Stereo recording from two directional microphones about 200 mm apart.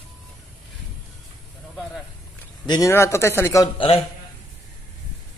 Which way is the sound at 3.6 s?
25° left (ahead or behind).